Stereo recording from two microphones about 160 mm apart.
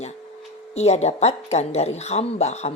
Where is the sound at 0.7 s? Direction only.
40° left (ahead or behind).